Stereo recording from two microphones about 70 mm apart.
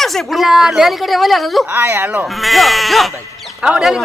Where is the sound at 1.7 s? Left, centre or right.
Right.